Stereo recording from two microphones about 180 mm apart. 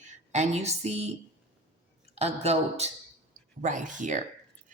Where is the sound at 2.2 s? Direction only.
35° right (ahead or behind).